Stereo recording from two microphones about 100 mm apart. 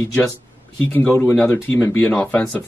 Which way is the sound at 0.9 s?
25° left (ahead or behind).